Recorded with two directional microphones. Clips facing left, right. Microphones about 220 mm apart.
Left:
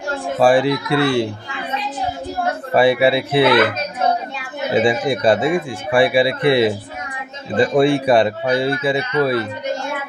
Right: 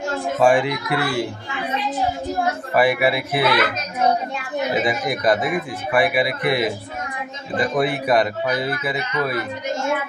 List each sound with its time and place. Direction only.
0.4 s speech: 35° left (ahead or behind)
2.7 s speech: 30° left (ahead or behind)
4.7 s speech: 30° left (ahead or behind)